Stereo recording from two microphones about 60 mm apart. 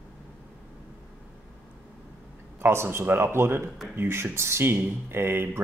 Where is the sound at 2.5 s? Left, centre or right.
Right.